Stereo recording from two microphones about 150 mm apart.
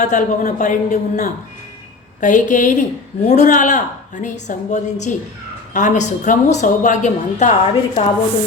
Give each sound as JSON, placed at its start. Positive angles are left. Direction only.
{"t": 0.0, "sound": "a woman's voice", "side_deg": 55}